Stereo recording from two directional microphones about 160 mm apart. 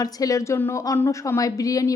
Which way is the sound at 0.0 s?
20° left (ahead or behind).